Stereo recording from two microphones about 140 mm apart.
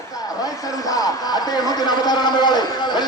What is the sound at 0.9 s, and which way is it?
A man's voice, 25° left (ahead or behind).